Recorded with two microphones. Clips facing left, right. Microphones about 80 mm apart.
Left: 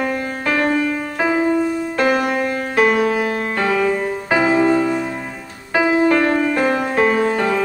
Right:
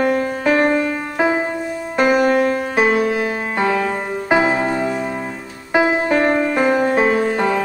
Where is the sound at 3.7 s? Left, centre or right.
Right.